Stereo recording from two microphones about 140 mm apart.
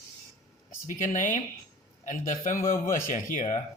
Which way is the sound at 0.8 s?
65° left (ahead or behind).